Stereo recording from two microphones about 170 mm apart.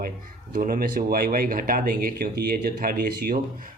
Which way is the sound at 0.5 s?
55° right (ahead or behind).